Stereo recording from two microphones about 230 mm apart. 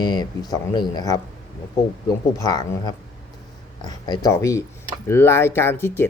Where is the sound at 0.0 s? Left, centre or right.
Centre.